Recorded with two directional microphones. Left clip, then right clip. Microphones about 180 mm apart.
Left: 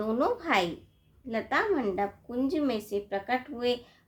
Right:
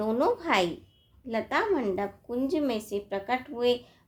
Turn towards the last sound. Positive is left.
turn(degrees=-25)  # may be behind; listen again after turning